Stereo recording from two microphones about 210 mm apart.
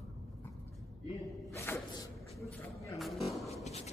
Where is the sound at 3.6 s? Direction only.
30° left (ahead or behind).